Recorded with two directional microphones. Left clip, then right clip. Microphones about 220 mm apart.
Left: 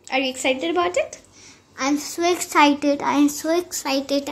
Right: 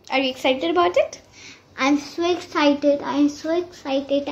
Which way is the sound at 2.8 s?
15° left (ahead or behind).